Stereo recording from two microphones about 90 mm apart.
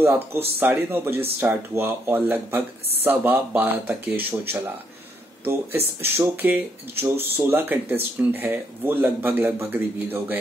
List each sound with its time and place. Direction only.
0.6 s speech: 20° right (ahead or behind)